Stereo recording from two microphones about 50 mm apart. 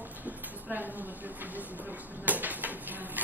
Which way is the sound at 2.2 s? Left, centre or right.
Right.